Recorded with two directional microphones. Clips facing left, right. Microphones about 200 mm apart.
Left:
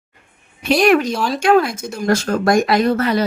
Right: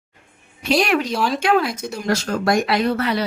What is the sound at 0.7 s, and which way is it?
Speech, 50° left (ahead or behind).